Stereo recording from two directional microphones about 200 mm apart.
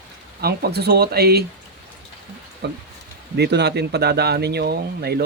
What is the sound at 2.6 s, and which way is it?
Speech, 60° right (ahead or behind).